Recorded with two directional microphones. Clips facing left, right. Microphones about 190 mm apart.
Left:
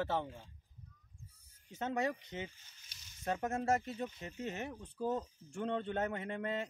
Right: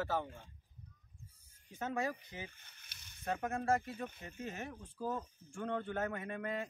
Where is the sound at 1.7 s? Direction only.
25° left (ahead or behind).